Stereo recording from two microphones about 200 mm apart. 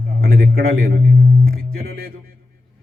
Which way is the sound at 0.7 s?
45° right (ahead or behind).